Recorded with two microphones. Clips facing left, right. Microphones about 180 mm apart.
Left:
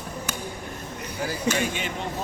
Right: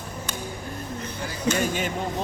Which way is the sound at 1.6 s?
45° right (ahead or behind).